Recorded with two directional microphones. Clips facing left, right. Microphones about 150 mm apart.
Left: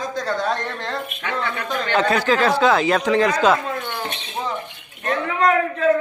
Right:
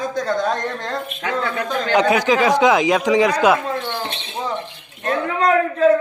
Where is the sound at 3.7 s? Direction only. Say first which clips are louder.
Right 2 dB; 30° right (ahead or behind).